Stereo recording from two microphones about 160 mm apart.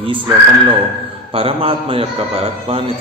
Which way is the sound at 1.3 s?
35° right (ahead or behind).